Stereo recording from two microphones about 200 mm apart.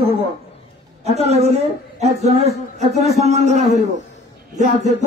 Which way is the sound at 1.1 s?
30° right (ahead or behind).